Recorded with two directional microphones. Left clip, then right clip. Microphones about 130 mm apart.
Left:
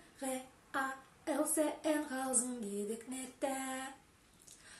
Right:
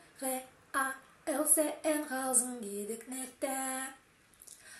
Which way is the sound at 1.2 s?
15° left (ahead or behind).